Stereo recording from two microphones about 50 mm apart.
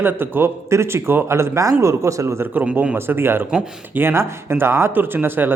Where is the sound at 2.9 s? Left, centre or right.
Right.